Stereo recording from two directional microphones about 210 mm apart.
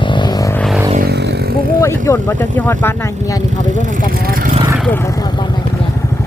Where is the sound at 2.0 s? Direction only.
10° left (ahead or behind).